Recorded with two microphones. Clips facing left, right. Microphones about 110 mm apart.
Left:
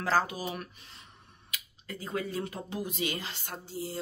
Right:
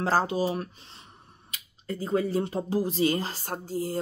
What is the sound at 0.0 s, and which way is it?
Speech, 30° right (ahead or behind).